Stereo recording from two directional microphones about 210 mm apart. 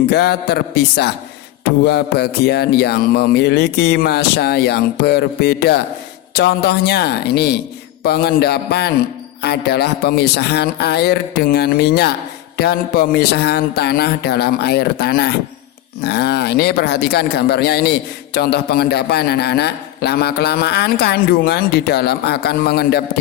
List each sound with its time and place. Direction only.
0.1 s speech: 50° left (ahead or behind)